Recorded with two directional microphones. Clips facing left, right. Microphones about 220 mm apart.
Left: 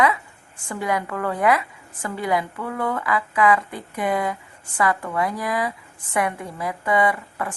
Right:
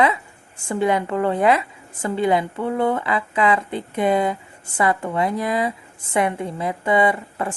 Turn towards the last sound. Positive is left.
turn(degrees=-25)  # may be behind; listen again after turning